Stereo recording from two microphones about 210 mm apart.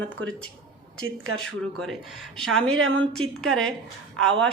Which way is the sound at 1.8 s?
Centre (ahead or behind).